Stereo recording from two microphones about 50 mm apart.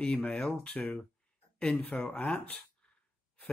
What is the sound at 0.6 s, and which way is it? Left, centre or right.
Speech, left.